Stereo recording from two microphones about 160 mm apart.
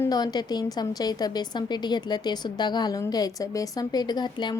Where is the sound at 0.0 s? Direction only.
25° left (ahead or behind).